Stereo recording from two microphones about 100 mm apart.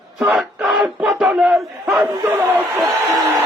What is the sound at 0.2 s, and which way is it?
Speech, 5° right (ahead or behind).